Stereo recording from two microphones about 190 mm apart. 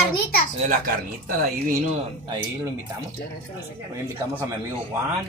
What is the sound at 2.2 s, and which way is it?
Speech, 20° right (ahead or behind).